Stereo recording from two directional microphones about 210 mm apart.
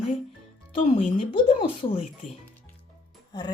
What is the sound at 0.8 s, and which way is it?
Speech, 35° left (ahead or behind).